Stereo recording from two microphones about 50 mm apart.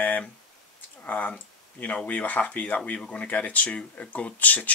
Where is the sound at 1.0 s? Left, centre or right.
Left.